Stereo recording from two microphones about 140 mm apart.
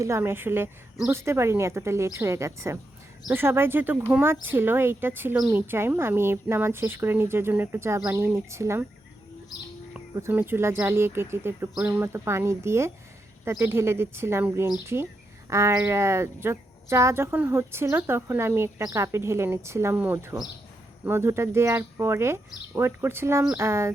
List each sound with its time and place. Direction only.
0.0 s speech: 20° right (ahead or behind)
9.9 s speech: 15° right (ahead or behind)